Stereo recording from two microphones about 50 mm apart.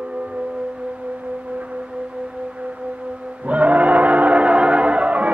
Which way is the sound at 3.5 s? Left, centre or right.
Right.